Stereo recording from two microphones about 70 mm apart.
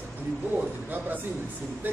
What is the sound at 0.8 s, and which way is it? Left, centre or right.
Speech, right.